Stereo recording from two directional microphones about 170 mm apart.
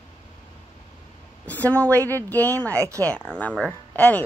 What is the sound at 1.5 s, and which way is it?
Speech, 10° left (ahead or behind).